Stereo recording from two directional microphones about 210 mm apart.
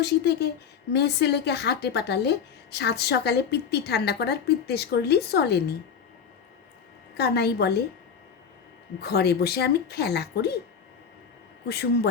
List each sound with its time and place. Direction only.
0.0 s a woman's voice: 50° left (ahead or behind)
7.2 s a woman's voice: 50° left (ahead or behind)
9.0 s a woman's voice: 50° left (ahead or behind)